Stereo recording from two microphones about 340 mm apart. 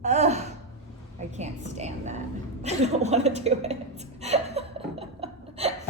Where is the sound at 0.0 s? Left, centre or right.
Centre.